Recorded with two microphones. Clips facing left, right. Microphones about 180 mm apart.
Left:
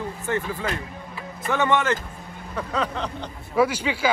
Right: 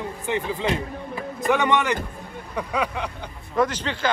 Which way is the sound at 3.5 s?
10° left (ahead or behind).